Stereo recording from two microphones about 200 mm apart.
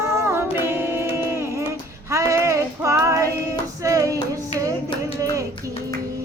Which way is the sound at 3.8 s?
15° right (ahead or behind).